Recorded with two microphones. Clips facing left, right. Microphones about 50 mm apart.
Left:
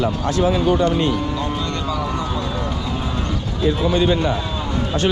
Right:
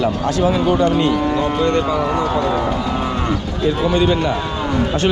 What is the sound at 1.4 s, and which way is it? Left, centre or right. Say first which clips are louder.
Speech: right 7 dB; right.